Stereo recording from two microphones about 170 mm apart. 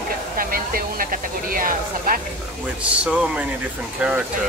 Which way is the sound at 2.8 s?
5° right (ahead or behind).